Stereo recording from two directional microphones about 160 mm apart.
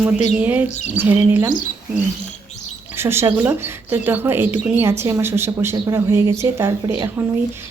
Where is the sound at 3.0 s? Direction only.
15° right (ahead or behind).